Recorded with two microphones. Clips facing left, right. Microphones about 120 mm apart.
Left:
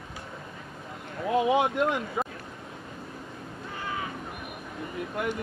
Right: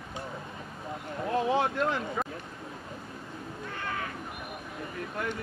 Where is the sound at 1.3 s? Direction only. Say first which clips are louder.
Left 4 dB; 15° left (ahead or behind).